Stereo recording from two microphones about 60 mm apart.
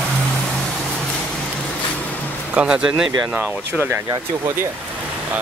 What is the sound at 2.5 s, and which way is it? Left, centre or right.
Speech, centre.